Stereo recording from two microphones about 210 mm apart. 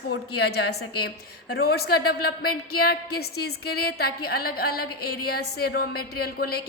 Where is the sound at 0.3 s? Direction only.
50° left (ahead or behind).